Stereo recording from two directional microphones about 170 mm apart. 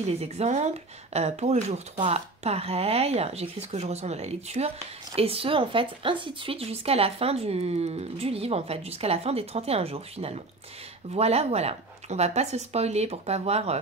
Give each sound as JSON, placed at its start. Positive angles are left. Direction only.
{"t": 0.0, "sound": "speech", "side_deg": -40}